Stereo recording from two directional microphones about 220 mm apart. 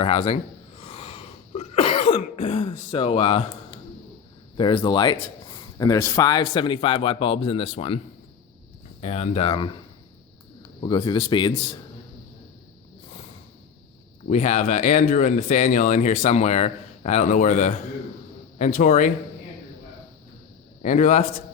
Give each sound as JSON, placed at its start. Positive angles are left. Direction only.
{"t": 0.0, "sound": "a man's voice", "side_deg": 25}
{"t": 0.8, "sound": "cough", "side_deg": 25}
{"t": 4.5, "sound": "a man's voice", "side_deg": 20}
{"t": 9.0, "sound": "a man's voice", "side_deg": 30}
{"t": 10.8, "sound": "a man's voice", "side_deg": 20}
{"t": 14.3, "sound": "speech", "side_deg": 30}
{"t": 20.8, "sound": "speech", "side_deg": 35}